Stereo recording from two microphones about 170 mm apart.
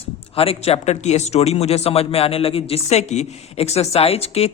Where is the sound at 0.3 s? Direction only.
35° left (ahead or behind).